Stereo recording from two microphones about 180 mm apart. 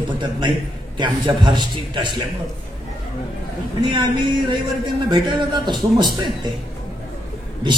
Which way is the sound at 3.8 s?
25° right (ahead or behind).